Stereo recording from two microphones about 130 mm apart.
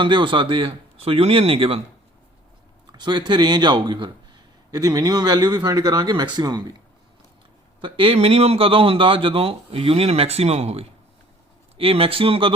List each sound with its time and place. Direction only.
0.0 s speech: 40° right (ahead or behind)
2.9 s speech: 35° right (ahead or behind)
7.8 s speech: 40° right (ahead or behind)